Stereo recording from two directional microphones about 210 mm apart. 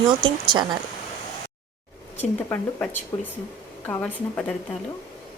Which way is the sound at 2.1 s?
10° left (ahead or behind).